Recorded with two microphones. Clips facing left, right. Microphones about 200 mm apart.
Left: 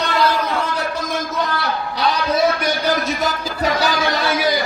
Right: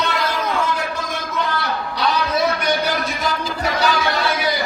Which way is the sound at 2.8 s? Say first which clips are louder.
Left 3 dB; 40° left (ahead or behind).